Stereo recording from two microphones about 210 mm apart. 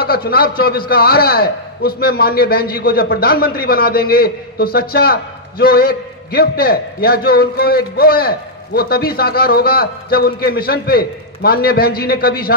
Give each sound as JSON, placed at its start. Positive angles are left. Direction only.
{"t": 0.0, "sound": "a man's voice", "side_deg": 45}